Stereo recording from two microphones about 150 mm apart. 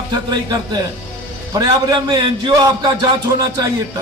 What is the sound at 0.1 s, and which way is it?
A man's voice, 25° right (ahead or behind).